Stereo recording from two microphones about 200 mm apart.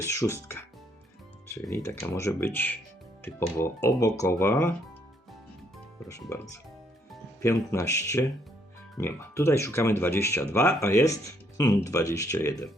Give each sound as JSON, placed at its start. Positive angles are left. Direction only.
{"t": 0.0, "sound": "speech", "side_deg": 15}
{"t": 1.7, "sound": "speech", "side_deg": 15}
{"t": 6.1, "sound": "speech", "side_deg": 15}
{"t": 7.4, "sound": "speech", "side_deg": 15}